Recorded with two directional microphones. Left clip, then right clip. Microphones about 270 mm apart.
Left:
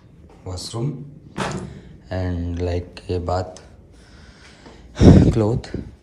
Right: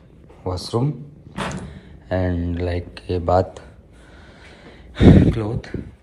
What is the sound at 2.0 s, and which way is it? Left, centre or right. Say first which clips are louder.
Speech: right 5 dB; centre.